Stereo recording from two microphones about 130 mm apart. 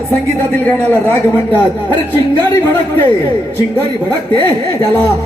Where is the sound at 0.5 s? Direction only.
15° left (ahead or behind).